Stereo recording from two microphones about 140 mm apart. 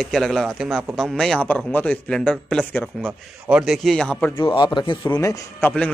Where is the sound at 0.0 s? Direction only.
Centre (ahead or behind).